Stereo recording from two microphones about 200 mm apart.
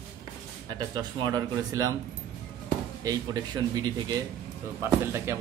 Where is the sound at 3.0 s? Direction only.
20° right (ahead or behind).